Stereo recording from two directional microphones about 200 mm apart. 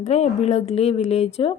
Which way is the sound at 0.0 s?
35° left (ahead or behind).